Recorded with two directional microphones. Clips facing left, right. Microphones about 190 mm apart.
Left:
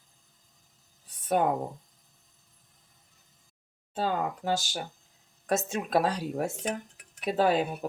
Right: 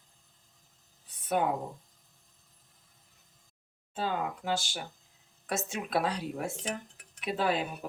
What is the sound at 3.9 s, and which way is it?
A woman's voice, 40° left (ahead or behind).